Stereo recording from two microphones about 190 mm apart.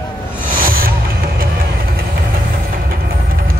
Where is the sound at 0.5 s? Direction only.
50° right (ahead or behind).